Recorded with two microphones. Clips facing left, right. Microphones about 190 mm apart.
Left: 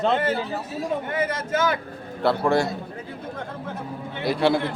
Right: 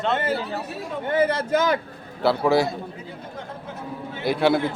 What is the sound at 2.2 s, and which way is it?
Speech, centre (ahead or behind).